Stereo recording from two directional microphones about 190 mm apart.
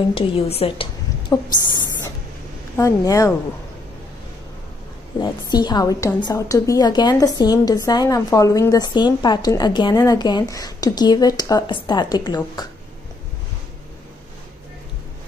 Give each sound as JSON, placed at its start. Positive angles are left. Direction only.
{"t": 0.1, "sound": "a woman's voice", "side_deg": 30}
{"t": 1.3, "sound": "a woman's voice", "side_deg": 20}
{"t": 5.2, "sound": "a woman's voice", "side_deg": 20}